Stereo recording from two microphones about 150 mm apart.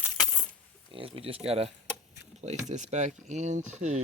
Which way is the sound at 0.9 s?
40° right (ahead or behind).